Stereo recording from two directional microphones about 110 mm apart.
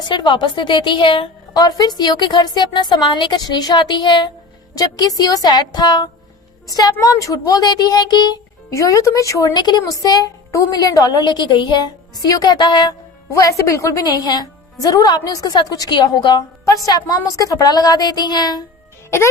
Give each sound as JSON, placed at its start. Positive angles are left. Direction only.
{"t": 0.0, "sound": "a woman's voice", "side_deg": 45}
{"t": 1.5, "sound": "a woman's voice", "side_deg": 35}
{"t": 8.7, "sound": "speech", "side_deg": 30}